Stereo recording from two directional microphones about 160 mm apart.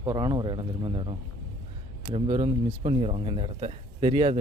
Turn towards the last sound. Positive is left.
turn(degrees=-35)  # may be behind; listen again after turning